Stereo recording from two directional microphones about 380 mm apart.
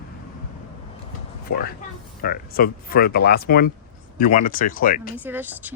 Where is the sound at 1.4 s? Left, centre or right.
Left.